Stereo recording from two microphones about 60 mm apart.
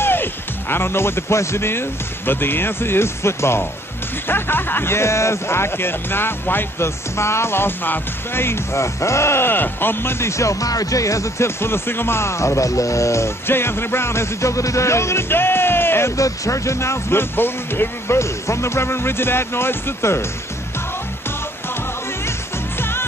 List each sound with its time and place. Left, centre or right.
0.0 s speech: left
7.2 s speech: left
10.2 s speech: left
13.5 s speech: left
16.2 s speech: left
22.8 s music: left